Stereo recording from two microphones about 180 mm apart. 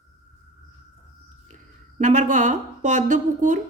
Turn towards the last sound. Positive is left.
turn(degrees=-45)  # may be behind; listen again after turning